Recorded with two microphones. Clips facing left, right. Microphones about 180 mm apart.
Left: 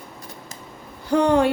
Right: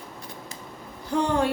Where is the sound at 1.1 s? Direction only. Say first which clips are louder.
Left 6 dB; 70° left (ahead or behind).